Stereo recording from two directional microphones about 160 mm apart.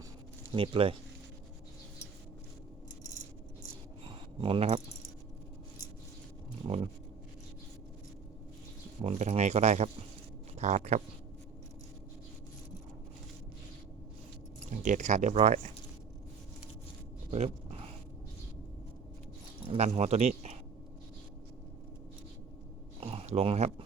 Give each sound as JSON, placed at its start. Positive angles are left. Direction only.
{"t": 0.5, "sound": "speech", "side_deg": -35}
{"t": 4.0, "sound": "keys jangling", "side_deg": -30}
{"t": 6.7, "sound": "speech", "side_deg": -35}
{"t": 9.0, "sound": "speech", "side_deg": -45}
{"t": 14.7, "sound": "speech", "side_deg": -50}
{"t": 17.3, "sound": "dog", "side_deg": -40}
{"t": 19.6, "sound": "speech", "side_deg": -40}
{"t": 23.0, "sound": "a sound", "side_deg": -40}